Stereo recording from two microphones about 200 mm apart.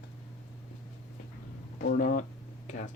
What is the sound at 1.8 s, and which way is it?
Speech, 50° left (ahead or behind).